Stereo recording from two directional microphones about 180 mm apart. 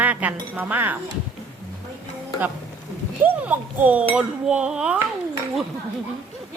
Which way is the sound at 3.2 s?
10° right (ahead or behind).